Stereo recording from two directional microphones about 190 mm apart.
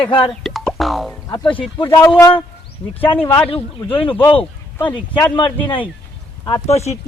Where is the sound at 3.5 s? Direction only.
30° left (ahead or behind).